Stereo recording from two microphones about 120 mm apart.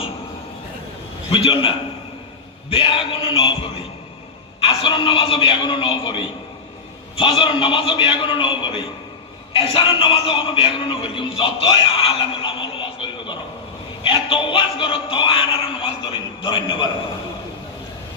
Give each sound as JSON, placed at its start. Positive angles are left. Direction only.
{"t": 1.3, "sound": "a man's voice", "side_deg": 45}